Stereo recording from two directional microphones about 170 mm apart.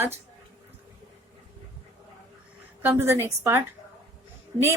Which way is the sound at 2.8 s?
15° right (ahead or behind).